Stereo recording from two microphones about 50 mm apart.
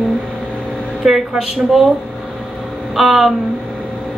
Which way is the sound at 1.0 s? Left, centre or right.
Centre.